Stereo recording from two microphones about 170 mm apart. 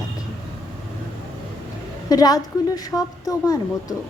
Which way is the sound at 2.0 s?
20° left (ahead or behind).